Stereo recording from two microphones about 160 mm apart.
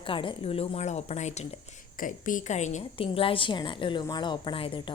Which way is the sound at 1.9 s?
55° left (ahead or behind).